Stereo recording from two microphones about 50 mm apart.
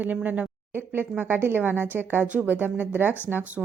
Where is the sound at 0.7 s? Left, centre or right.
Right.